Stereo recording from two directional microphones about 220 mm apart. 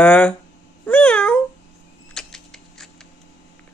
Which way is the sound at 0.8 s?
5° left (ahead or behind).